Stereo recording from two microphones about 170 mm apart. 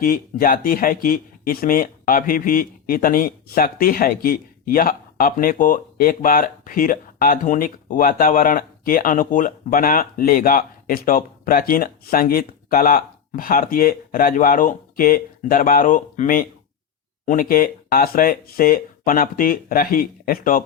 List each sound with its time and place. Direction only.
0.0 s speech: 55° left (ahead or behind)